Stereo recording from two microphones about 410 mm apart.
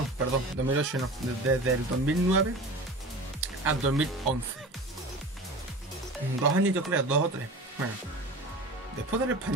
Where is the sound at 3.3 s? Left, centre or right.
Right.